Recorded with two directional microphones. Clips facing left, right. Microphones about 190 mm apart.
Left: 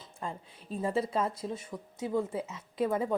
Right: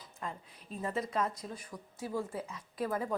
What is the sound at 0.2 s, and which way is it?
Speech, 30° left (ahead or behind).